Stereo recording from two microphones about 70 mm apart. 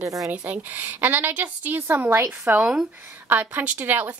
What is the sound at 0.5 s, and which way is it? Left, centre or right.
Speech, right.